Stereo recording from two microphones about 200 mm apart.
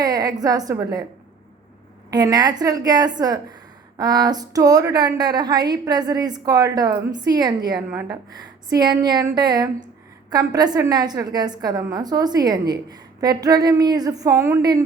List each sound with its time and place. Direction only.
0.0 s a woman's voice: 20° right (ahead or behind)
2.0 s a woman's voice: 20° right (ahead or behind)